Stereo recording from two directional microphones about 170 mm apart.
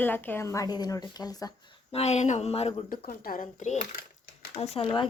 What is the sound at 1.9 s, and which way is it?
Speech, 40° left (ahead or behind).